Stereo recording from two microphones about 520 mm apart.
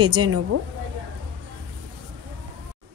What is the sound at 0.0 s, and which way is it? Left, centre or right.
Speech, right.